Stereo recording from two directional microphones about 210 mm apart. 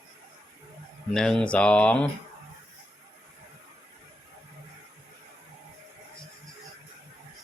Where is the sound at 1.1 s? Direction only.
5° left (ahead or behind).